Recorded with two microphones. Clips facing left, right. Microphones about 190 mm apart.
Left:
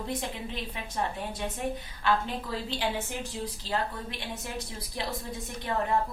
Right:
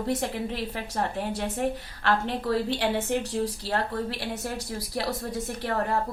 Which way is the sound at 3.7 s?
75° right (ahead or behind).